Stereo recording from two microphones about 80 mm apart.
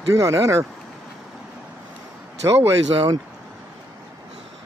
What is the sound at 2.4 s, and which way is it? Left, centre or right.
Speech, right.